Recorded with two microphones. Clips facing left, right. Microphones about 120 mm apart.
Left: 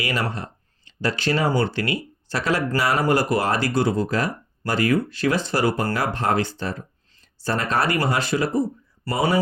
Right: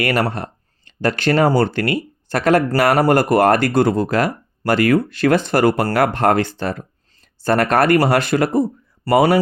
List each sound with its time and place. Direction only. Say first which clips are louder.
0.0 s speech: right 7 dB; 65° right (ahead or behind)
9.0 s speech: right 8 dB; 90° right